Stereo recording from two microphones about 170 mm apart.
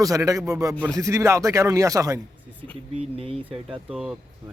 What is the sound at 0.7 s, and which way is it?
Speech, 5° left (ahead or behind).